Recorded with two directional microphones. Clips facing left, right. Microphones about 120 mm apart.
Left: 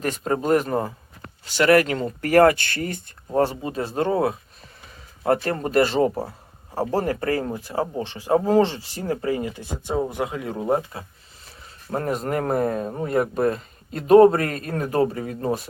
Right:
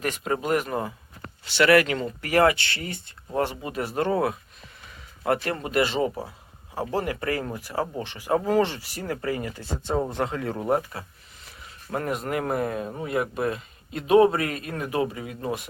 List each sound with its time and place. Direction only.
0.0 s a man's voice: 35° left (ahead or behind)
3.3 s speech: 30° left (ahead or behind)
11.4 s a man's voice: 35° left (ahead or behind)